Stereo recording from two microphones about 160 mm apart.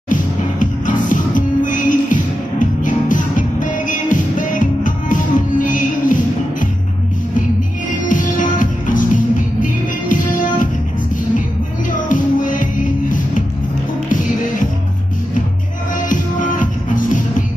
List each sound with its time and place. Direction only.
0.1 s music: 55° left (ahead or behind)
8.1 s music: 55° left (ahead or behind)
12.1 s music: 55° left (ahead or behind)
14.0 s music: 55° left (ahead or behind)
16.0 s music: 55° left (ahead or behind)